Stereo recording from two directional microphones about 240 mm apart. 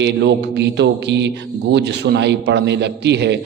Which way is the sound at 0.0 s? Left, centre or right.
Right.